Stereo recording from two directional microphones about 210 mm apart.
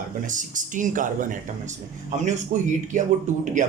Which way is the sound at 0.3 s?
35° right (ahead or behind).